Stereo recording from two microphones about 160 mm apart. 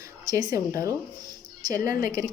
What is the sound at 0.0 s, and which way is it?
Speech, 25° right (ahead or behind).